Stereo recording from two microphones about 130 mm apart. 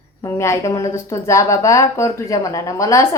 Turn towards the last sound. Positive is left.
turn(degrees=25)  # may be behind; listen again after turning